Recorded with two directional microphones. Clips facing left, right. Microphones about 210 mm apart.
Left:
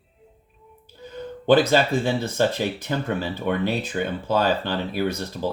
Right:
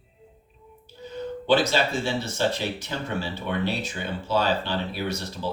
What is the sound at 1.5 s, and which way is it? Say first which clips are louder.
Speech: left 5 dB; 55° left (ahead or behind).